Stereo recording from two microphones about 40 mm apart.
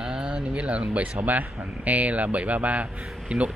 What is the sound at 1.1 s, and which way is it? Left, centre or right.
Speech, right.